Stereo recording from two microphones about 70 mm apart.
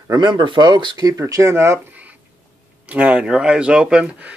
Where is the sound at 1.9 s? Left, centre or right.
Right.